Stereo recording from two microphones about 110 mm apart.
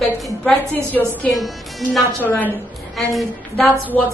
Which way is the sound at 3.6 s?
15° left (ahead or behind).